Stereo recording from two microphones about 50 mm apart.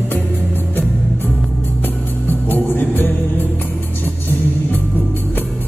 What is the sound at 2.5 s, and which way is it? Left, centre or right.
Music, left.